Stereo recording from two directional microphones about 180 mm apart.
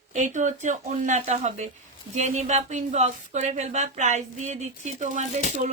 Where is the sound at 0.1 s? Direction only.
40° right (ahead or behind).